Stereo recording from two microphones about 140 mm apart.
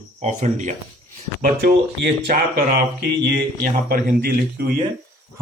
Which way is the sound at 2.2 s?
50° right (ahead or behind).